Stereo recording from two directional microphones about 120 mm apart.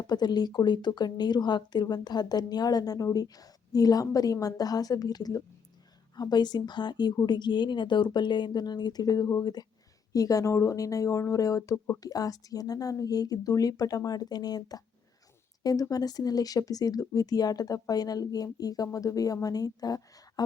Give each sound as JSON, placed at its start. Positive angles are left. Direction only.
{"t": 0.1, "sound": "speech", "side_deg": 35}